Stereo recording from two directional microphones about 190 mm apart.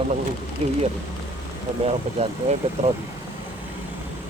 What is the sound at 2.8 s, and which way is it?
Speech, 35° right (ahead or behind).